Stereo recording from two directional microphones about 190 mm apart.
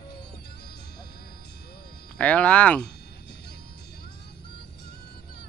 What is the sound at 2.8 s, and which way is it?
Music, 60° left (ahead or behind).